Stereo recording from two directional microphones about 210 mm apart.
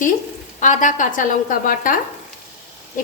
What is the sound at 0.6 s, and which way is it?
A woman's voice, 35° left (ahead or behind).